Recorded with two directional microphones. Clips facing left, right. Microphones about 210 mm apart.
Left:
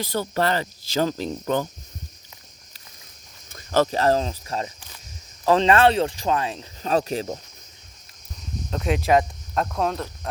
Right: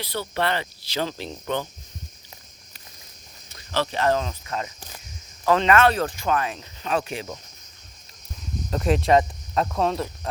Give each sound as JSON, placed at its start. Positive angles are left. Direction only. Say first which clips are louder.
{"t": 0.0, "sound": "speech", "louder": "left 3 dB", "side_deg": 45}
{"t": 3.5, "sound": "speech", "louder": "left 6 dB", "side_deg": 45}
{"t": 8.7, "sound": "speech", "louder": "right 1 dB", "side_deg": 0}